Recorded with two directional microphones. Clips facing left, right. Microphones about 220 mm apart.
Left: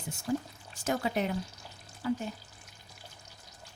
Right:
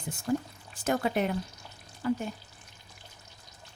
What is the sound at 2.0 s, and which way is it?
Frying, 55° right (ahead or behind).